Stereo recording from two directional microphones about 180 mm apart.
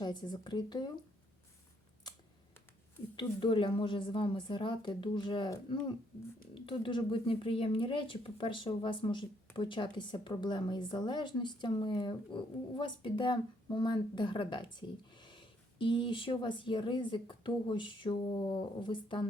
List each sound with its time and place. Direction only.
0.0 s speech: 25° left (ahead or behind)
3.2 s speech: 30° left (ahead or behind)